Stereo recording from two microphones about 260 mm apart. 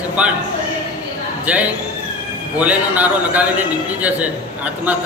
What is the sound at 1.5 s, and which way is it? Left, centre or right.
A man's voice, centre.